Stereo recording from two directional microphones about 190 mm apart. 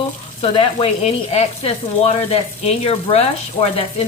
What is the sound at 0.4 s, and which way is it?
Sizzle, 30° left (ahead or behind).